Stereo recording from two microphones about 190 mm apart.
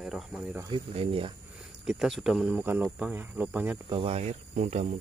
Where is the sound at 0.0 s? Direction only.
Centre (ahead or behind).